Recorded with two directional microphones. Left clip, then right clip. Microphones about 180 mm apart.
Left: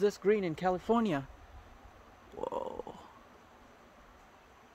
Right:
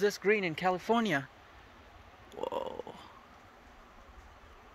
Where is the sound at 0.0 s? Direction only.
20° left (ahead or behind).